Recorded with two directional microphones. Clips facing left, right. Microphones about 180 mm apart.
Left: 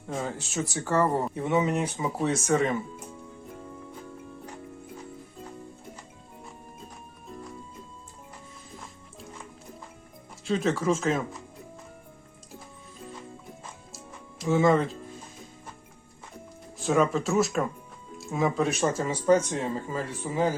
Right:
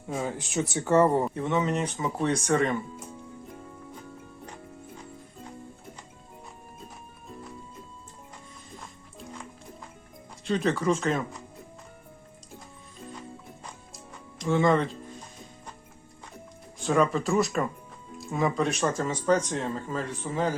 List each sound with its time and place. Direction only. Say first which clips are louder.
0.1 s speech: right 1 dB; 10° right (ahead or behind)
1.3 s speech: left 1 dB; 10° left (ahead or behind)
10.4 s speech: even; centre (ahead or behind)
13.9 s music: left 1 dB; 5° left (ahead or behind)
16.7 s speech: even; centre (ahead or behind)